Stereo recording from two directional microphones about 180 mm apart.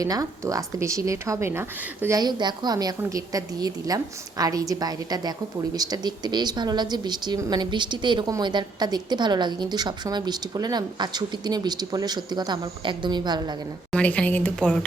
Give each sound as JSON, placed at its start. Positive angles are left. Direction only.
{"t": 0.0, "sound": "speech", "side_deg": -20}
{"t": 13.9, "sound": "speech", "side_deg": 5}